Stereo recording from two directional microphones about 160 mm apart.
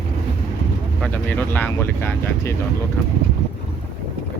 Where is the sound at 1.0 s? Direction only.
10° left (ahead or behind).